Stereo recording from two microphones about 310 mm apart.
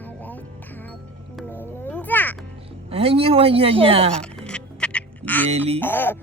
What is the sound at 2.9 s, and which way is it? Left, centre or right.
Speech, centre.